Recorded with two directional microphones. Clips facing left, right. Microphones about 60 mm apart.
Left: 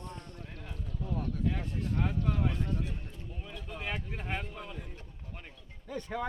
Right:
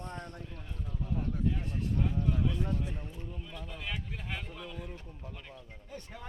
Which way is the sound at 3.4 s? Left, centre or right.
Left.